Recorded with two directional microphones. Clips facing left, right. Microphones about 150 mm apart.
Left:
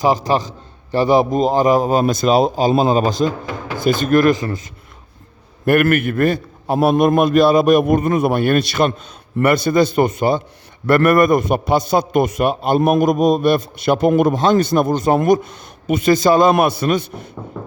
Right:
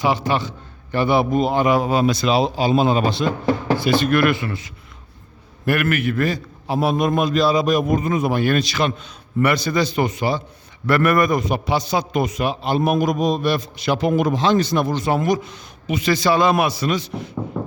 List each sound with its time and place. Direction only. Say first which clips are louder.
0.0 s a man's voice: left 4 dB; 40° left (ahead or behind)